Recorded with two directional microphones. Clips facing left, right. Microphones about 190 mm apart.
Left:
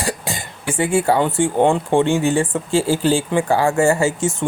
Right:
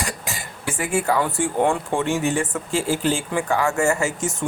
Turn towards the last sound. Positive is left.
turn(degrees=30)  # may be behind; listen again after turning